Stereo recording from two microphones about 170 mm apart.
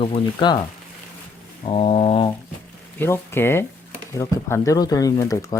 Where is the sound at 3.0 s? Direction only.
15° left (ahead or behind).